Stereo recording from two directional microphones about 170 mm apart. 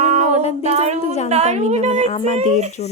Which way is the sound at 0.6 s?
40° right (ahead or behind).